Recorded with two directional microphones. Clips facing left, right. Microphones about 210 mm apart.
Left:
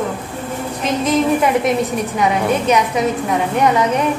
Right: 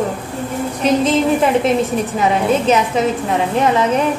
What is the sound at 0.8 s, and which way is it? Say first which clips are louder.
A woman's voice: right 2 dB; 30° right (ahead or behind).